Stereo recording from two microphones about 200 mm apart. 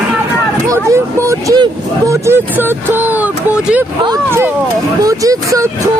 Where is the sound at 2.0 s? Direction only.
10° right (ahead or behind).